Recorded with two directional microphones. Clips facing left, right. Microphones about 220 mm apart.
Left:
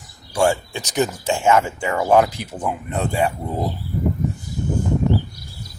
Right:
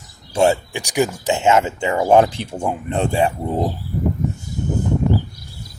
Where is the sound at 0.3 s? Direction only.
20° right (ahead or behind).